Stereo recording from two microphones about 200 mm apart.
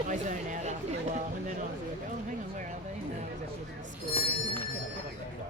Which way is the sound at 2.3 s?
40° right (ahead or behind).